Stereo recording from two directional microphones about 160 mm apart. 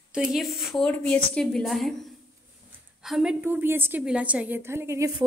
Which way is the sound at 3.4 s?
15° right (ahead or behind).